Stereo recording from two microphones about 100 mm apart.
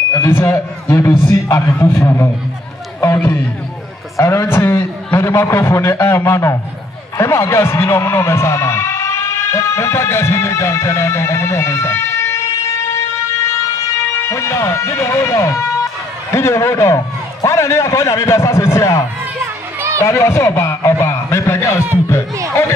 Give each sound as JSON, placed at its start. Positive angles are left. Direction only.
{"t": 0.1, "sound": "a man's voice", "side_deg": 25}
{"t": 19.4, "sound": "children playing", "side_deg": -25}
{"t": 20.0, "sound": "a man's voice", "side_deg": 25}